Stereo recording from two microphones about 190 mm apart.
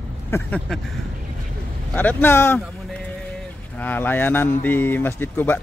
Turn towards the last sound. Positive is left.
turn(degrees=10)  # may be behind; listen again after turning